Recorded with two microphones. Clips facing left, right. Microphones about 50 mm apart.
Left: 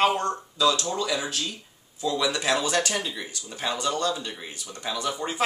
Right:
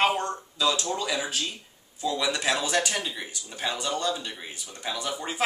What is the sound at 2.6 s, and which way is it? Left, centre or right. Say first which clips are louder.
Speech: left 1 dB; centre.